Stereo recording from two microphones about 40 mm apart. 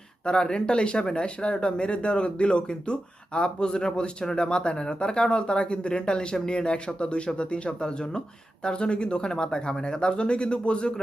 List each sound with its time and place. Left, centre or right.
0.3 s speech: left